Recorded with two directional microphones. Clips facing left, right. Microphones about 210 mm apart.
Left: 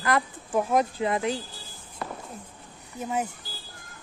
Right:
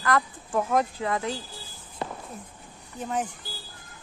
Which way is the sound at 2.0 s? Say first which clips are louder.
Right 2 dB; 25° right (ahead or behind).